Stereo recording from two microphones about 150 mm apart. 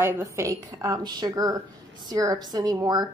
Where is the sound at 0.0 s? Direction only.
20° right (ahead or behind).